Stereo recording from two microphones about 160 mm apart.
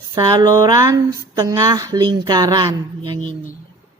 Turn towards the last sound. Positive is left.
turn(degrees=-25)  # may be behind; listen again after turning